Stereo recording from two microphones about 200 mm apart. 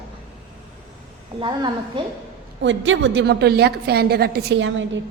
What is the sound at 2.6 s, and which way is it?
A woman's voice, 70° right (ahead or behind).